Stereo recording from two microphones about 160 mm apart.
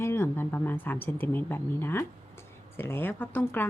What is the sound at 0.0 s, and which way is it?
Speech, 15° left (ahead or behind).